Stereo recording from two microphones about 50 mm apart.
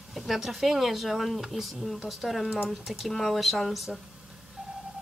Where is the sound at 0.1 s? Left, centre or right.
Centre.